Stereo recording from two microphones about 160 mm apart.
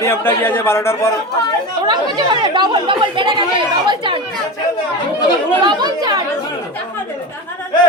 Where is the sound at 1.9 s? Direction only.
30° right (ahead or behind).